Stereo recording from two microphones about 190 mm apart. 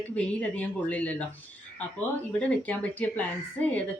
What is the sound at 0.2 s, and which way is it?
Speech, 5° left (ahead or behind).